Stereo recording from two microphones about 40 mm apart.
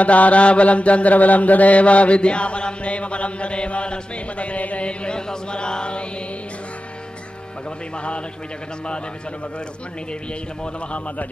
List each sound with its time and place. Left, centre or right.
0.0 s mantra: left
7.9 s a man's voice: left